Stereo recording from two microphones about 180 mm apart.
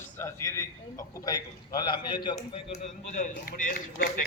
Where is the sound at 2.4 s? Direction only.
40° left (ahead or behind).